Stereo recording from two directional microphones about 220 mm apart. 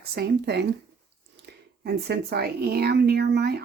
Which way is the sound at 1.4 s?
50° right (ahead or behind).